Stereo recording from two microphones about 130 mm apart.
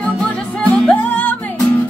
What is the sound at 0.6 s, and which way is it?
Music, 10° left (ahead or behind).